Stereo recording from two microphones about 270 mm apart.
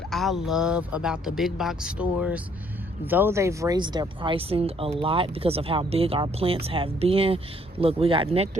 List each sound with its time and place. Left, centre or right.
0.1 s speech: centre; by 8.4 s right